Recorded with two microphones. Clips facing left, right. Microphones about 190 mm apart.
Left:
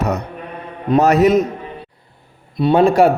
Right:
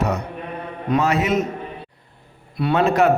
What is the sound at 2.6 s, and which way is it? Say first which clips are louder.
Speech: left 5 dB; 30° left (ahead or behind).